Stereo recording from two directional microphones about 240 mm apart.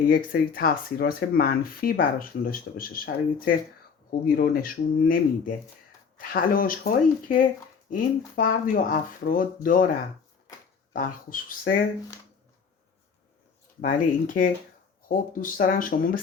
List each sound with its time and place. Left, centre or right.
0.1 s speech: left
4.4 s speech: left
10.9 s speech: left
13.8 s speech: left